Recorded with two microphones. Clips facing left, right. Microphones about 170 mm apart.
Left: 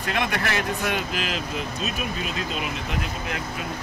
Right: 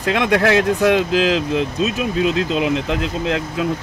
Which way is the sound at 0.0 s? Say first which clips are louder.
Right 10 dB; 90° right.